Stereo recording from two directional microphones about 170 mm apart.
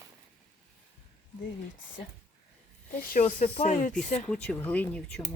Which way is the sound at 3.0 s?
50° left (ahead or behind).